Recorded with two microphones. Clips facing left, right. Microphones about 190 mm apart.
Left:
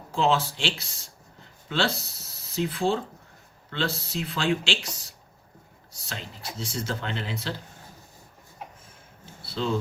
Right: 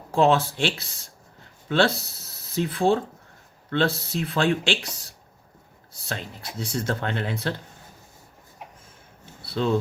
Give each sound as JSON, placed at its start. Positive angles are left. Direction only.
{"t": 0.2, "sound": "speech", "side_deg": -55}
{"t": 5.9, "sound": "speech", "side_deg": -55}